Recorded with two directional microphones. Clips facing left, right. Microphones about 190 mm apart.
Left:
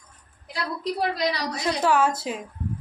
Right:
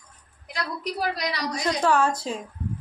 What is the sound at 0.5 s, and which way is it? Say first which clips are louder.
A woman's voice: left 2 dB; 25° left (ahead or behind).